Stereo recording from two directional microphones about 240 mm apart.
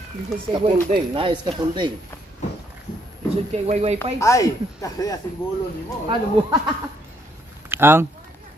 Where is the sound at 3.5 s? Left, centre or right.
Right.